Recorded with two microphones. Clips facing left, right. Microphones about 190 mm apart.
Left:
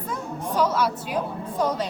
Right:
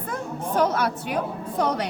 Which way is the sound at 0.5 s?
55° right (ahead or behind).